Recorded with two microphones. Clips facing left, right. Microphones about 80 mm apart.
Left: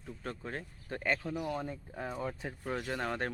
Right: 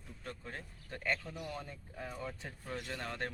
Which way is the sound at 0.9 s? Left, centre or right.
Left.